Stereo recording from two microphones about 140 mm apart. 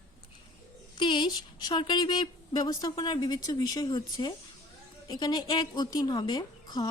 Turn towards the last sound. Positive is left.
turn(degrees=30)  # may be behind; listen again after turning